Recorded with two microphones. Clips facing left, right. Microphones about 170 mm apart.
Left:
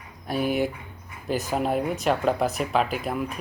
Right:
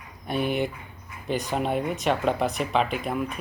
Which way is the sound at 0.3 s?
5° left (ahead or behind).